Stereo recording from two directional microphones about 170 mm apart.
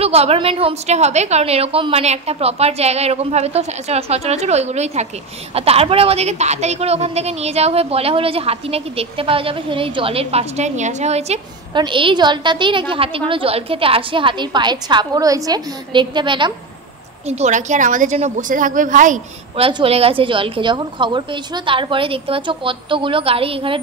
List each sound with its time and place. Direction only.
0.0 s a woman's voice: 35° right (ahead or behind)
11.7 s a woman's voice: 30° right (ahead or behind)
17.3 s a woman's voice: 45° right (ahead or behind)
19.5 s a woman's voice: 35° right (ahead or behind)